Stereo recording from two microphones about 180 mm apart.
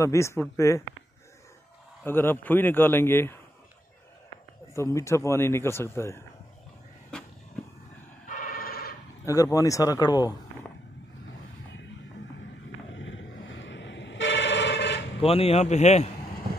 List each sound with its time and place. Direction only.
0.0 s speech: 15° left (ahead or behind)
2.0 s speech: 10° left (ahead or behind)
4.7 s speech: 15° left (ahead or behind)
8.3 s a sound: 50° left (ahead or behind)
9.2 s speech: 20° left (ahead or behind)
12.9 s vehicle: 90° left
15.1 s a man's voice: 35° left (ahead or behind)